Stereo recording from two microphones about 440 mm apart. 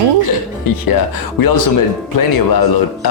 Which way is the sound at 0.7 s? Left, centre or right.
Left.